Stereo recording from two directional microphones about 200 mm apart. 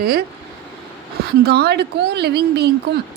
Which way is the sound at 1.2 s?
50° right (ahead or behind).